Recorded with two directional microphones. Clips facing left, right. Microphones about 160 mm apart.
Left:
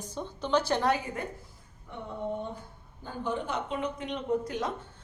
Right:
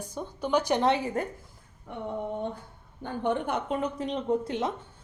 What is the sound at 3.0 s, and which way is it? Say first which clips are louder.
Speech: right 5 dB; 65° right (ahead or behind).